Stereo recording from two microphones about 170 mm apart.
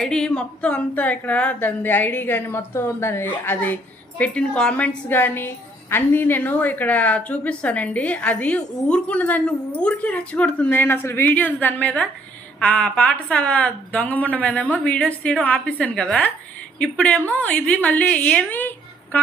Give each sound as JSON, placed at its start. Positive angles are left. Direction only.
{"t": 0.0, "sound": "a woman's voice", "side_deg": 5}